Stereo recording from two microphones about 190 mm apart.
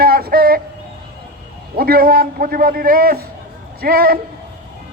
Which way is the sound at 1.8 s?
50° right (ahead or behind).